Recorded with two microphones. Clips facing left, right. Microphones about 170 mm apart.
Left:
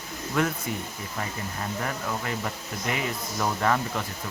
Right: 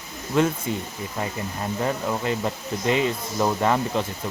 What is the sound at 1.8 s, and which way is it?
Speech, 25° right (ahead or behind).